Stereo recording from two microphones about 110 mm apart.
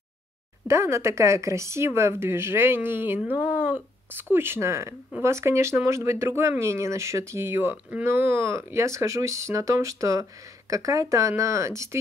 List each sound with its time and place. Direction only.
0.7 s speech: 25° right (ahead or behind)